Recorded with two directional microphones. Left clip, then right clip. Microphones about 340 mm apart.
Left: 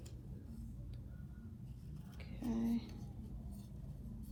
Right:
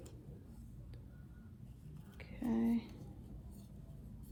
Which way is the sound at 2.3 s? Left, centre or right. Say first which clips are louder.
Right 3 dB; right.